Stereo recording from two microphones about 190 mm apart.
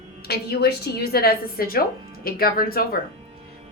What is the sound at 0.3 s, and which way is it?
Speech, 55° left (ahead or behind).